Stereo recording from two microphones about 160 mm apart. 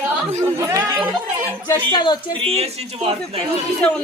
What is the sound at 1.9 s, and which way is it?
Speech, 30° left (ahead or behind).